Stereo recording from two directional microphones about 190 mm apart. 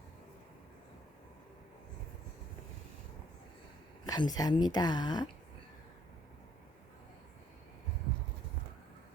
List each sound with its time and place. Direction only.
4.0 s speech: 20° left (ahead or behind)